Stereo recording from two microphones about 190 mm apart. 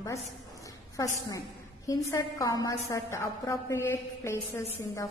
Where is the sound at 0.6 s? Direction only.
15° left (ahead or behind).